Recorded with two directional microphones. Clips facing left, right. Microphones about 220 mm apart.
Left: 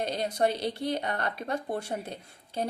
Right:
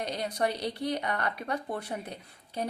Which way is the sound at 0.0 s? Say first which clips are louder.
Left 3 dB; 25° left (ahead or behind).